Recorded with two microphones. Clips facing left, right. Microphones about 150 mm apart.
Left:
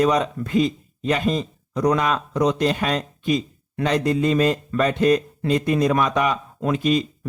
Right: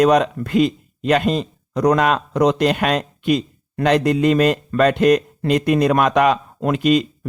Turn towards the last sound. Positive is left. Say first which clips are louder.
# right 4 dB
turn(degrees=-70)  # may be behind; listen again after turning